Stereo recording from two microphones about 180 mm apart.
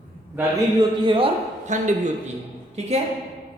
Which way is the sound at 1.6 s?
40° right (ahead or behind).